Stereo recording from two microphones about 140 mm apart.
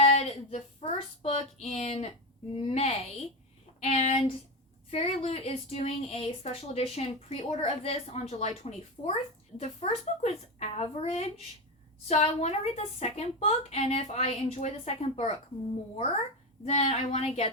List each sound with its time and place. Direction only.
0.0 s child singing: 50° left (ahead or behind)
2.6 s a woman's voice: 50° left (ahead or behind)
16.6 s a woman's voice: 50° left (ahead or behind)